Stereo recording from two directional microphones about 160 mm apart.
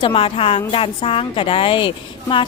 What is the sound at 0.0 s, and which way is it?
Speech, 35° left (ahead or behind).